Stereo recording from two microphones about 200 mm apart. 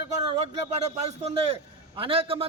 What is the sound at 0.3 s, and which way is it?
A man's voice, 30° right (ahead or behind).